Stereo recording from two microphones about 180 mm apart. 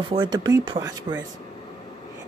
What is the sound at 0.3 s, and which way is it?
Speech, 20° right (ahead or behind).